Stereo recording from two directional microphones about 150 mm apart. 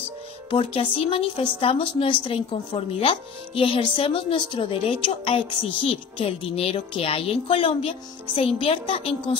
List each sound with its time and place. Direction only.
0.5 s a woman's voice: 40° left (ahead or behind)